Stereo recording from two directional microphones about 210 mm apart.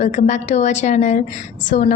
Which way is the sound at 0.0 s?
35° left (ahead or behind).